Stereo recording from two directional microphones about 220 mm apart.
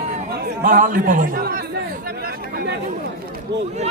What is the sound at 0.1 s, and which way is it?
A man's voice, 40° right (ahead or behind).